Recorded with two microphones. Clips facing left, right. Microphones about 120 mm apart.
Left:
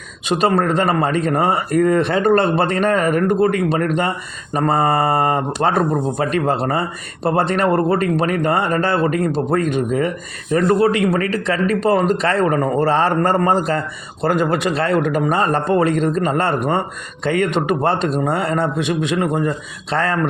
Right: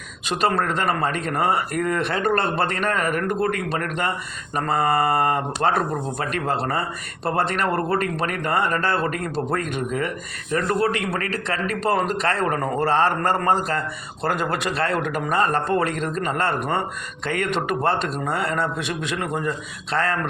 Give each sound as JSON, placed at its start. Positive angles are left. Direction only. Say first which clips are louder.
{"t": 0.3, "sound": "speech", "louder": "left 5 dB", "side_deg": 20}
{"t": 11.2, "sound": "a man's voice", "louder": "left 7 dB", "side_deg": -50}
{"t": 11.8, "sound": "speech", "louder": "left 3 dB", "side_deg": 20}